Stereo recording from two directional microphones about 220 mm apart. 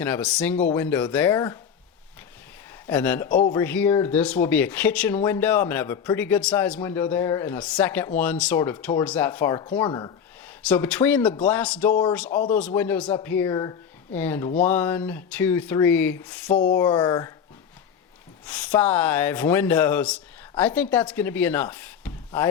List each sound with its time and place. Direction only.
0.0 s speech: 5° left (ahead or behind)
2.8 s speech: 5° left (ahead or behind)
3.2 s speech: 40° left (ahead or behind)
3.5 s speech: 10° left (ahead or behind)
10.7 s speech: 5° left (ahead or behind)
16.7 s speech: 20° left (ahead or behind)
18.4 s speech: 5° left (ahead or behind)